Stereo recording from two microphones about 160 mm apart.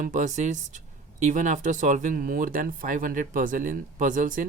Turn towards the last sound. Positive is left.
turn(degrees=-55)  # may be behind; listen again after turning